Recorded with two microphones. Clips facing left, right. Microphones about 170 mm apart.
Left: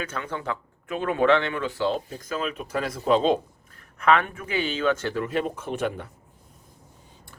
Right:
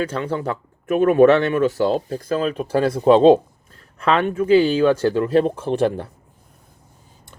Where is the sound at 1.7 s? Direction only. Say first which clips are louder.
Right 6 dB; 40° right (ahead or behind).